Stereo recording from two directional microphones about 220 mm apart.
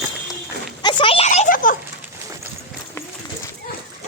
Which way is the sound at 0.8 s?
25° left (ahead or behind).